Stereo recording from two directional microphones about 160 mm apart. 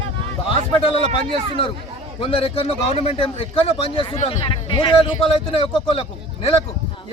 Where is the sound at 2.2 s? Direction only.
35° left (ahead or behind).